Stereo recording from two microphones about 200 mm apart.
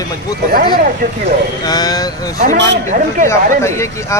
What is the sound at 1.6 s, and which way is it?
Speech, 20° left (ahead or behind).